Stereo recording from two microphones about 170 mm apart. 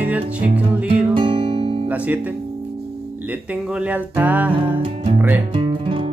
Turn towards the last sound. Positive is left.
turn(degrees=-30)  # may be behind; listen again after turning